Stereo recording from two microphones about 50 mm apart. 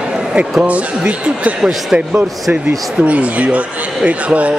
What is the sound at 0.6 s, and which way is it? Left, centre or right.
Speech, right.